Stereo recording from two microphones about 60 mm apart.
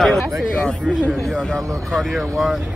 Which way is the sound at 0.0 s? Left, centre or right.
Centre.